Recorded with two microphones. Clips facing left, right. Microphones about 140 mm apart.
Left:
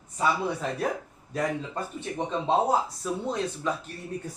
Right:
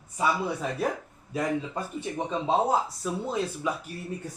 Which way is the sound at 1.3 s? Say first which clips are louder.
Right 1 dB; 10° right (ahead or behind).